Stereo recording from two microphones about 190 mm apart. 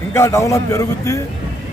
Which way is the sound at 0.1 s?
15° left (ahead or behind).